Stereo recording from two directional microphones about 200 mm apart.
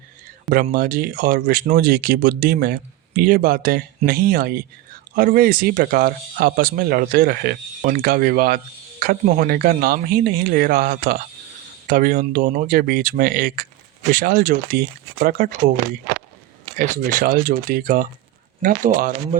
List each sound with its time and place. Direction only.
0.5 s speech: 50° right (ahead or behind)